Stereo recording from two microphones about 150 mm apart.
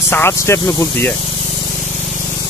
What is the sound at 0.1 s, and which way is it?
Speech, 15° left (ahead or behind).